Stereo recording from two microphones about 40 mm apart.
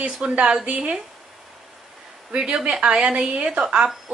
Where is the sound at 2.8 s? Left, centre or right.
Right.